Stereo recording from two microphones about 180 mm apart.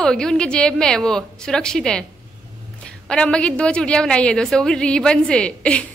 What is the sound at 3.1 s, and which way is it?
A woman's voice, 5° left (ahead or behind).